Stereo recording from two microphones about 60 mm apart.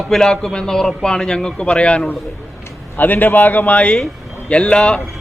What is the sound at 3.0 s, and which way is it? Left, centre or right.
A man's voice, left.